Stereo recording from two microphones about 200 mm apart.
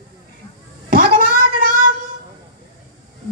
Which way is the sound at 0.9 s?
45° right (ahead or behind).